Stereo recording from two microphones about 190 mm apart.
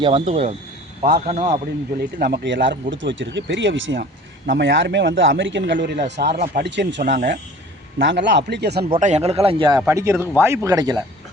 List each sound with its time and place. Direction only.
0.0 s speech: 30° right (ahead or behind)
2.0 s speech: 55° right (ahead or behind)
6.4 s speech: 45° right (ahead or behind)
6.7 s speech: 70° right (ahead or behind)
8.8 s speech: 35° right (ahead or behind); by 11.0 s 20° right (ahead or behind)